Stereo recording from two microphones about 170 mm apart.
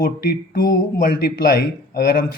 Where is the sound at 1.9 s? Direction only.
60° left (ahead or behind).